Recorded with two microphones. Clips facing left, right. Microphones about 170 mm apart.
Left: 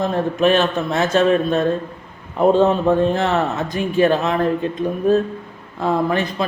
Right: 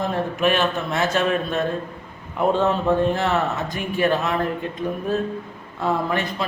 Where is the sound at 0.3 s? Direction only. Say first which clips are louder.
Left 5 dB; 25° left (ahead or behind).